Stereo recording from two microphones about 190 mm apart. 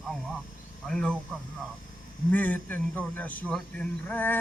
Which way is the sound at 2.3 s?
10° left (ahead or behind).